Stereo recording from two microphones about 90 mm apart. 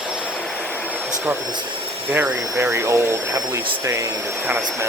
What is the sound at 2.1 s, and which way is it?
Speech, 25° right (ahead or behind).